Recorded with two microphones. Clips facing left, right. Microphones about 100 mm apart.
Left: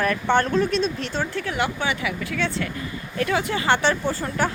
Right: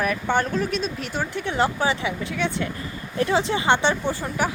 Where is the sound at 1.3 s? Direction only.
25° right (ahead or behind).